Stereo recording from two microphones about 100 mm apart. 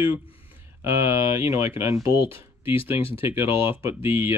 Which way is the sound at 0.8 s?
25° right (ahead or behind).